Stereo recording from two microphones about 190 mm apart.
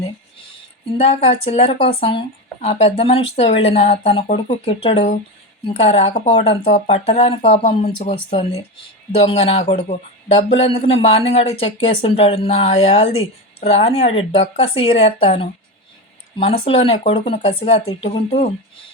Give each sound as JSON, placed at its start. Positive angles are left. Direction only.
{"t": 0.9, "sound": "speech", "side_deg": 30}